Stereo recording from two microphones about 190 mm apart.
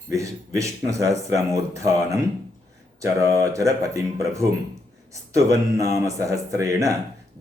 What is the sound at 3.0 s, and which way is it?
Speech, 15° right (ahead or behind).